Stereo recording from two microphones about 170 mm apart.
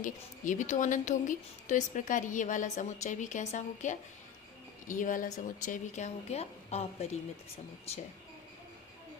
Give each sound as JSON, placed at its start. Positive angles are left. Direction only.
{"t": 0.0, "sound": "a woman's voice", "side_deg": 50}